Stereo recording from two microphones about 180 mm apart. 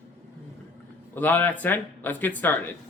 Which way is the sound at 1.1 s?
10° left (ahead or behind).